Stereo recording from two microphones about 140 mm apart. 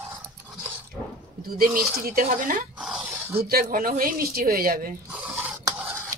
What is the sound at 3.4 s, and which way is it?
Speech, 90° right.